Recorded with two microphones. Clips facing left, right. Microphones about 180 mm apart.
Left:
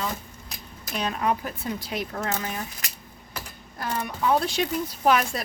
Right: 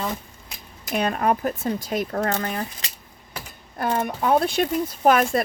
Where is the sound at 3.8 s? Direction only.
50° right (ahead or behind).